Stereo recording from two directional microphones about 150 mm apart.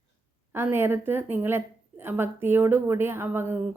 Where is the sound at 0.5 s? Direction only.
15° right (ahead or behind).